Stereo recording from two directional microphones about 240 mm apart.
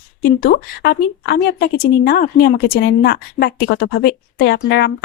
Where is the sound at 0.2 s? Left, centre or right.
Left.